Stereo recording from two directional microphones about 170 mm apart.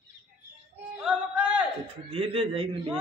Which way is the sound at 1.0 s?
5° right (ahead or behind).